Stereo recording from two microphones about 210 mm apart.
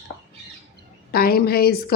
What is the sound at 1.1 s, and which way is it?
Speech, 45° left (ahead or behind).